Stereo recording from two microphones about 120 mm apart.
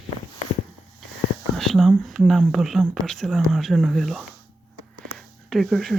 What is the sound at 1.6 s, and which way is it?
Speech, centre (ahead or behind).